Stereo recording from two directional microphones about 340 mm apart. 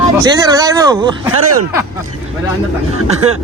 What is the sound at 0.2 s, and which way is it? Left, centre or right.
Speech, centre.